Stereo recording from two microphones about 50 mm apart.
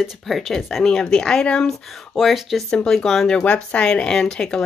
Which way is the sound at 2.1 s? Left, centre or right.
Centre.